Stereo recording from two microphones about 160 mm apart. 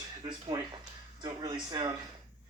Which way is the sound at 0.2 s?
30° right (ahead or behind).